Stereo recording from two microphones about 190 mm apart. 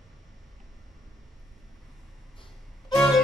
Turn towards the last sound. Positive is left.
turn(degrees=0)  # may be behind; listen again after turning